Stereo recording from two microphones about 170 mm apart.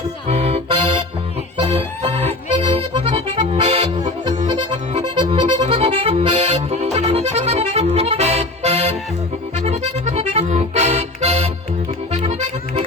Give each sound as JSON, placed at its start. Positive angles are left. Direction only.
{"t": 0.3, "sound": "accordion", "side_deg": -35}